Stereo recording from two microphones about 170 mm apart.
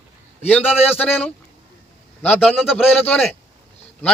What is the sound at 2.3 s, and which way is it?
Speech, 5° right (ahead or behind).